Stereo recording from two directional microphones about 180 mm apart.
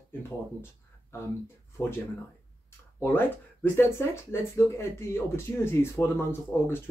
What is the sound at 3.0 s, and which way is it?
Speech, 10° left (ahead or behind).